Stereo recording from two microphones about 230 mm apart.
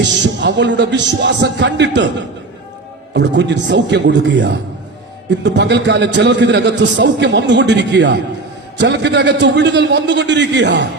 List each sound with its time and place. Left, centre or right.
0.0 s a man's voice: right
3.1 s a man's voice: right